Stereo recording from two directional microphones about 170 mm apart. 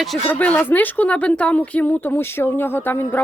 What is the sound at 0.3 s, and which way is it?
Speech, 10° left (ahead or behind).